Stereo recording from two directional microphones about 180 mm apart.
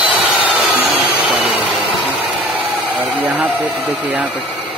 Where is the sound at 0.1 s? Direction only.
5° right (ahead or behind).